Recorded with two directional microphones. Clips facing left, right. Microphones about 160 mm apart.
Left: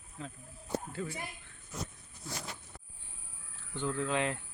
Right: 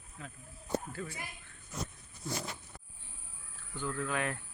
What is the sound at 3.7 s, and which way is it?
Speech, 20° left (ahead or behind).